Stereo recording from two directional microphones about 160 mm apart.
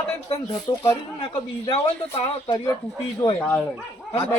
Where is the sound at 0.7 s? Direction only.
25° left (ahead or behind).